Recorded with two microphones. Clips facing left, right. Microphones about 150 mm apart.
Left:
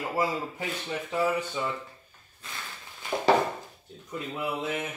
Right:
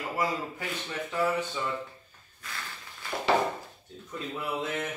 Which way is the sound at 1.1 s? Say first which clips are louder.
Left 1 dB; 15° left (ahead or behind).